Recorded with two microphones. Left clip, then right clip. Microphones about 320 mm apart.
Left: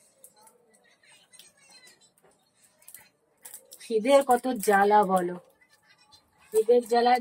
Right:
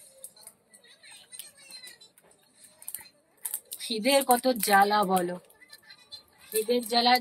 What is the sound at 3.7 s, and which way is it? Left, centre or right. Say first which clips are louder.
Speech: left 4 dB; centre.